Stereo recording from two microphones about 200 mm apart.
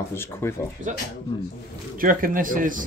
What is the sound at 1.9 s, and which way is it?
Speech, 45° right (ahead or behind).